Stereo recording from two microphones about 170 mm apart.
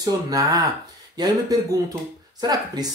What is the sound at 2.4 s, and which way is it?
Speech, 25° right (ahead or behind).